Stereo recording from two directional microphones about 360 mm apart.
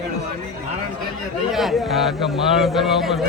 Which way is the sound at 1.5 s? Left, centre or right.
Centre.